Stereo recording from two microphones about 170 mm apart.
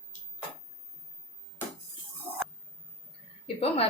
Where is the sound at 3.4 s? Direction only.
35° left (ahead or behind).